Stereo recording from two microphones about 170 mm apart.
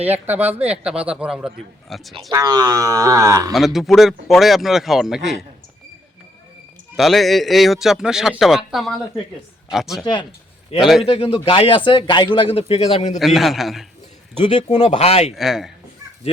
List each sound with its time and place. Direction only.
0.0 s speech: 10° right (ahead or behind)
2.3 s speech: 25° right (ahead or behind)
3.5 s speech: centre (ahead or behind)
6.9 s speech: centre (ahead or behind)
10.0 s speech: 25° left (ahead or behind)
10.8 s speech: centre (ahead or behind)
11.0 s speech: 35° left (ahead or behind)
13.1 s speech: centre (ahead or behind)
14.4 s speech: 35° left (ahead or behind)
15.3 s speech: centre (ahead or behind)